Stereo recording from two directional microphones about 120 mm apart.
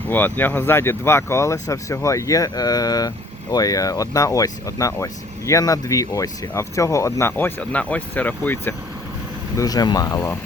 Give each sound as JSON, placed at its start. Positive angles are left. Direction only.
{"t": 0.1, "sound": "speech", "side_deg": 15}
{"t": 9.6, "sound": "speech", "side_deg": 30}